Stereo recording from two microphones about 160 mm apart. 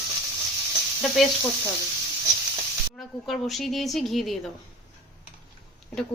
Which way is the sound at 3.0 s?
Centre (ahead or behind).